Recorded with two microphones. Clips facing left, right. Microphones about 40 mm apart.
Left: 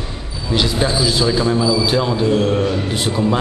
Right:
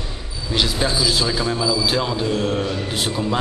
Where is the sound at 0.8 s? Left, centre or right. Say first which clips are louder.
Left 3 dB; centre.